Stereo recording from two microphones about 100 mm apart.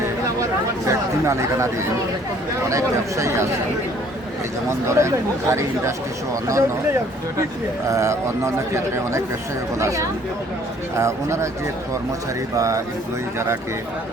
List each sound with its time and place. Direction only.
0.9 s a man's voice: 30° right (ahead or behind)
4.9 s a man's voice: 30° right (ahead or behind)
12.5 s speech: 35° right (ahead or behind)